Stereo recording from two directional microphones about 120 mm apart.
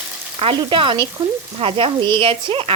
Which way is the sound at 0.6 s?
45° right (ahead or behind).